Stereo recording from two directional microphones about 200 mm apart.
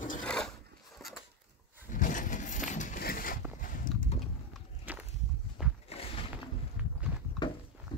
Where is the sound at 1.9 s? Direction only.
40° left (ahead or behind).